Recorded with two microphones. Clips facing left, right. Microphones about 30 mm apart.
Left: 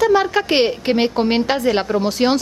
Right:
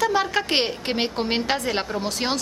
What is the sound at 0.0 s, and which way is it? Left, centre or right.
A woman's voice, centre.